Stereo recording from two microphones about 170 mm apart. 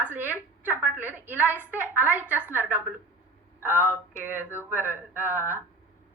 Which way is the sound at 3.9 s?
10° right (ahead or behind).